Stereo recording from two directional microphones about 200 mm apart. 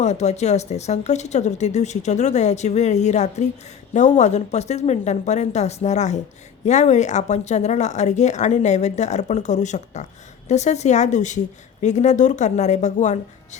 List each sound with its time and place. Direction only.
0.0 s speech: 35° left (ahead or behind)